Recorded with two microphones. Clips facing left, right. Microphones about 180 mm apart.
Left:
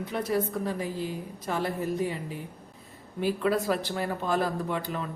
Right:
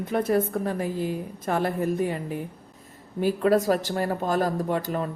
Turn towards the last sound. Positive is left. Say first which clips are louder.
# right 5 dB
turn(degrees=-45)  # may be behind; listen again after turning